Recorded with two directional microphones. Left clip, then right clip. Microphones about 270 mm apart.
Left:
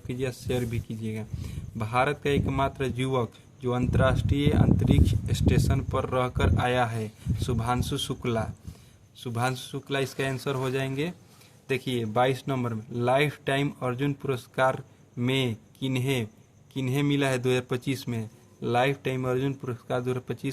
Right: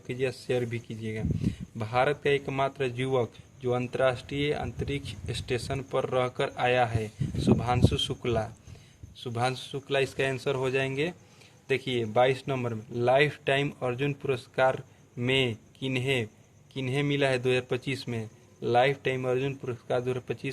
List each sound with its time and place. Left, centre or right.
0.1 s speech: left